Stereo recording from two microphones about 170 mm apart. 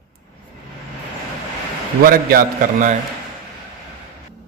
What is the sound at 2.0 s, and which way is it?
Speech, 60° right (ahead or behind).